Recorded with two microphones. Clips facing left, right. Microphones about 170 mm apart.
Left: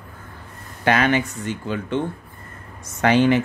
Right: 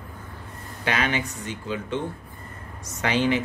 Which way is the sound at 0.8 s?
55° left (ahead or behind).